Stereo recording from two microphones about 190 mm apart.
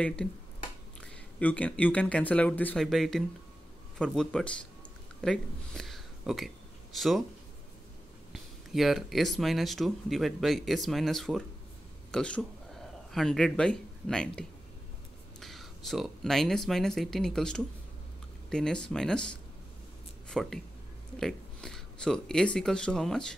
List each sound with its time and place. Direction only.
0.0 s speech: 5° left (ahead or behind)
8.3 s speech: centre (ahead or behind)
15.4 s speech: centre (ahead or behind)